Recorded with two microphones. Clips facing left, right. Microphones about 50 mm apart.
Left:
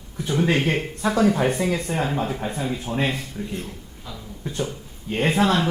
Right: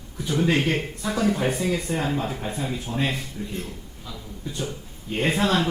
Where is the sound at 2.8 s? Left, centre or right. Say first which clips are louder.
Left 3 dB; left.